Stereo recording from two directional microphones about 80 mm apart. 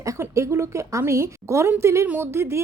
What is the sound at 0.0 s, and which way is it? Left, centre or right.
A woman's voice, right.